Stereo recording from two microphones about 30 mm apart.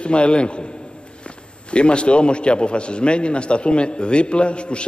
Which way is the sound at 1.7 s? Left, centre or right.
Left.